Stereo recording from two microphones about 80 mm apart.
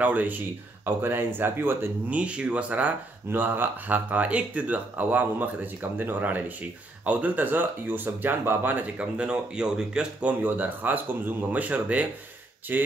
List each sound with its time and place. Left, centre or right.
0.0 s speech: centre
10.4 s speech: right